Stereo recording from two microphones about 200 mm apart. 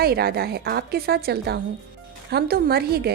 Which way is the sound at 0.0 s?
50° right (ahead or behind).